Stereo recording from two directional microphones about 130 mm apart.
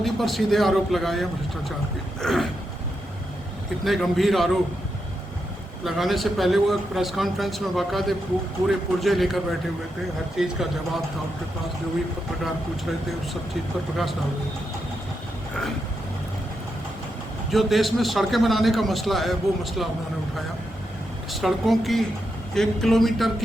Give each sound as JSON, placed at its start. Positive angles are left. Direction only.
{"t": 0.0, "sound": "a man's voice", "side_deg": 0}
{"t": 3.8, "sound": "a man's voice", "side_deg": 0}
{"t": 5.8, "sound": "a man's voice", "side_deg": 0}
{"t": 17.5, "sound": "a man's voice", "side_deg": 0}
{"t": 21.4, "sound": "a man's voice", "side_deg": 0}